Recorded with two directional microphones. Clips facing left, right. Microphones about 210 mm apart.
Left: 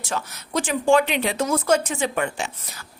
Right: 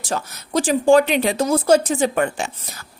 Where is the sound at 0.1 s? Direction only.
40° right (ahead or behind).